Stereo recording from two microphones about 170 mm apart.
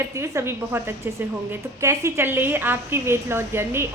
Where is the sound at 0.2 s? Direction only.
15° right (ahead or behind).